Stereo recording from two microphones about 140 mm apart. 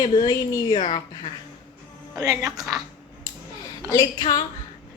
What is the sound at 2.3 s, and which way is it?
Speech, 5° right (ahead or behind).